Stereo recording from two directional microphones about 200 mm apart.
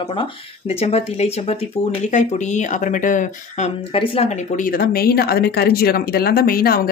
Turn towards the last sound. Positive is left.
turn(degrees=45)  # may be behind; listen again after turning